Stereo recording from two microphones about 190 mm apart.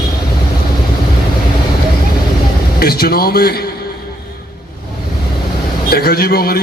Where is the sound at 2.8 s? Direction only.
55° left (ahead or behind).